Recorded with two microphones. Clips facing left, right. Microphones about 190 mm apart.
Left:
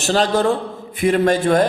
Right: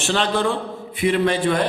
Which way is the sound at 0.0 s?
40° left (ahead or behind).